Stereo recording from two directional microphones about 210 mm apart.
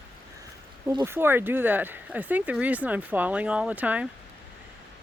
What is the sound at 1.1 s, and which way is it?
Speech, 10° right (ahead or behind).